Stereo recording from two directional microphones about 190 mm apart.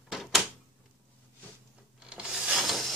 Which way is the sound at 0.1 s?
Centre (ahead or behind).